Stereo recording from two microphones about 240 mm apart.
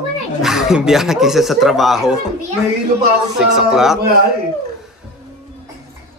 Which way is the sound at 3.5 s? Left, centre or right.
Centre.